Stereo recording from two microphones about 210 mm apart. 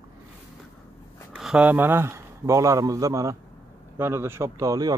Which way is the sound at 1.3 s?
5° right (ahead or behind).